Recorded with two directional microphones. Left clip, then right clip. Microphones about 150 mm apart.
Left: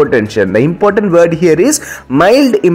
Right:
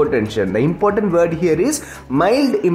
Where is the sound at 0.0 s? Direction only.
25° left (ahead or behind).